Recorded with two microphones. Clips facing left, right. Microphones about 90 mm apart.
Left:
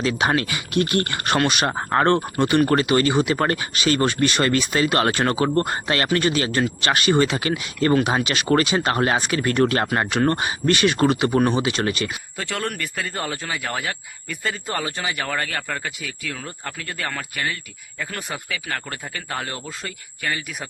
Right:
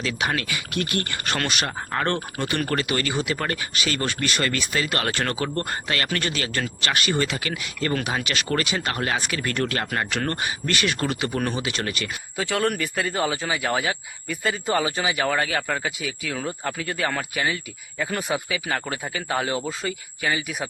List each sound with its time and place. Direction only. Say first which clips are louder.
0.0 s speech: left 5 dB; 35° left (ahead or behind)
1.6 s speech: left 7 dB; 40° left (ahead or behind)
2.4 s speech: left 7 dB; 20° left (ahead or behind)
12.4 s speech: right 4 dB; 5° right (ahead or behind)